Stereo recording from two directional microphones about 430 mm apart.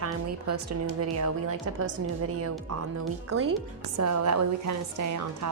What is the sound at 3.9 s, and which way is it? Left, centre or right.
A woman's voice, right.